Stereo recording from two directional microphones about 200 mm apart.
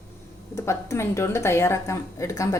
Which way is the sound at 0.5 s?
15° left (ahead or behind).